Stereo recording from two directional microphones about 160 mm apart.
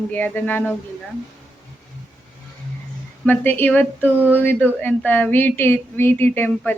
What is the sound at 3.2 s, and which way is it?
A woman's voice, 10° left (ahead or behind).